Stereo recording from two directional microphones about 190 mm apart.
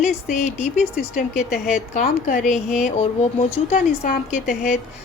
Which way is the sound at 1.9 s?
45° left (ahead or behind).